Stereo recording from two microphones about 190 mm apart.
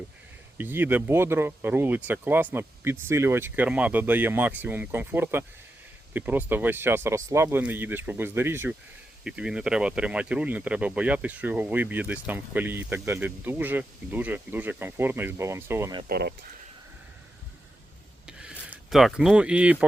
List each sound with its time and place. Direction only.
0.6 s speech: 10° right (ahead or behind)
16.0 s speech: 55° right (ahead or behind)
18.3 s a sound: 5° right (ahead or behind)